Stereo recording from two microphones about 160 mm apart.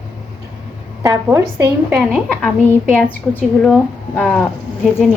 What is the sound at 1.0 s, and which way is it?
Speech, 20° right (ahead or behind).